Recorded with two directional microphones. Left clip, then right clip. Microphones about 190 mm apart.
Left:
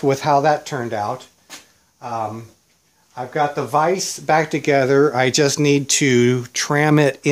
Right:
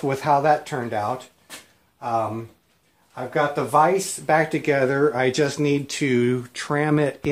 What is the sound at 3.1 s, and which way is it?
Speech, 25° left (ahead or behind).